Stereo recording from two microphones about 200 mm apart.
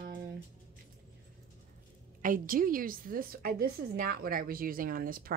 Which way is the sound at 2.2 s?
45° right (ahead or behind).